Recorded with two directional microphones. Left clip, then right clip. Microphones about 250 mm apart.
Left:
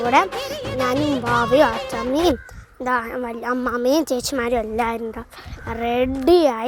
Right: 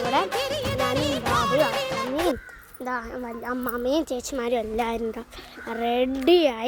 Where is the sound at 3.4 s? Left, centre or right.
Left.